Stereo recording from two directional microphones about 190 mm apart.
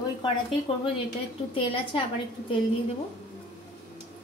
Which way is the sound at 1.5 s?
30° left (ahead or behind).